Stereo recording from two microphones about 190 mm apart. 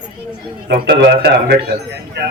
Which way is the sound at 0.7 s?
65° right (ahead or behind).